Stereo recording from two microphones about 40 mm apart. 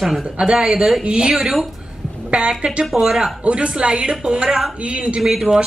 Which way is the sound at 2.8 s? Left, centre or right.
Centre.